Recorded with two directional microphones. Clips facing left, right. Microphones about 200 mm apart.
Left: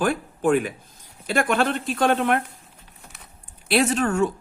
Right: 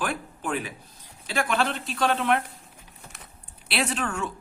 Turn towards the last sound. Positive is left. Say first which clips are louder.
# left 8 dB
turn(degrees=40)  # may be behind; listen again after turning